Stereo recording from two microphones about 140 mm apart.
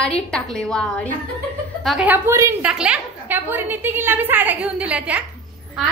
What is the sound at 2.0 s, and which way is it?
Speech, 20° right (ahead or behind).